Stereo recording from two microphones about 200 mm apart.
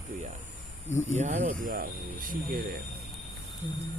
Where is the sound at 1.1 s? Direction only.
35° right (ahead or behind).